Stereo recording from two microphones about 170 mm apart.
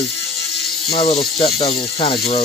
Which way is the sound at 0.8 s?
35° left (ahead or behind).